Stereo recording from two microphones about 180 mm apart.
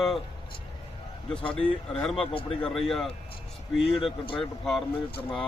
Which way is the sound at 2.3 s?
30° left (ahead or behind).